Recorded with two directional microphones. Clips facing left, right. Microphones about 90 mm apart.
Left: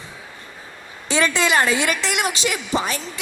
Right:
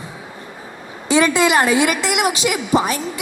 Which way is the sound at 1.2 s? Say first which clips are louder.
Right 1 dB; 15° right (ahead or behind).